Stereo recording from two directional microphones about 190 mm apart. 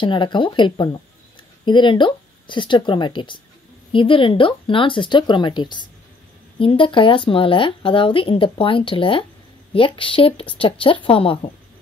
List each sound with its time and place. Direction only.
0.0 s speech: 25° left (ahead or behind)